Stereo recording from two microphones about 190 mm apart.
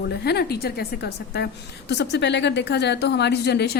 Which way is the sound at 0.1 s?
60° left (ahead or behind).